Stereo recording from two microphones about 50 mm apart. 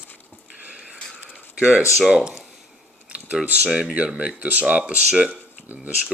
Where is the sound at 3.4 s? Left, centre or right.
Right.